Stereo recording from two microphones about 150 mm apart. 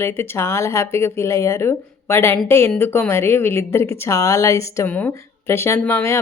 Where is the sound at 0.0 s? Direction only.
15° left (ahead or behind).